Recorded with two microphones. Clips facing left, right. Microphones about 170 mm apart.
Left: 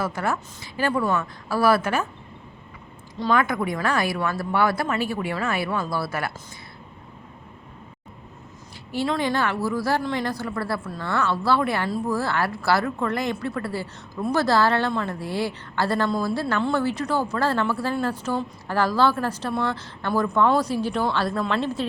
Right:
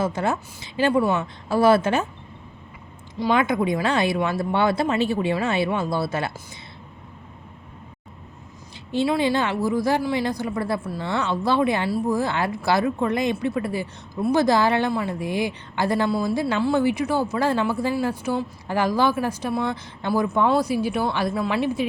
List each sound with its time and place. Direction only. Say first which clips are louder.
0.0 s speech: right 2 dB; 20° right (ahead or behind)
3.2 s speech: right 2 dB; 15° right (ahead or behind)
9.0 s speech: right 2 dB; 15° right (ahead or behind)